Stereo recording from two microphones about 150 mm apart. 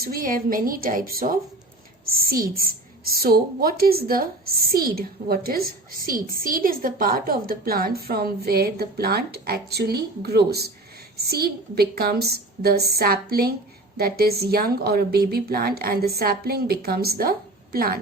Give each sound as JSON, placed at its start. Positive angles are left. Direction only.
{"t": 0.0, "sound": "a woman's voice", "side_deg": -75}